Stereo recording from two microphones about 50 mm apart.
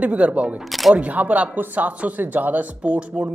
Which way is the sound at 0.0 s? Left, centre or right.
Right.